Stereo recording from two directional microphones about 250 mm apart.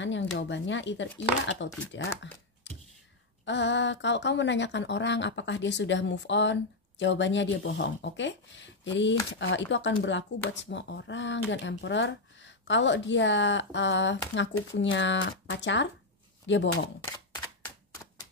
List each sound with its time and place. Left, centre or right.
0.0 s speech: left
3.4 s speech: left
17.0 s typewriter: centre